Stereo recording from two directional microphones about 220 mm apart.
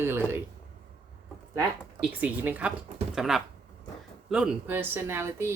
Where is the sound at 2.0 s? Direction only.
5° right (ahead or behind).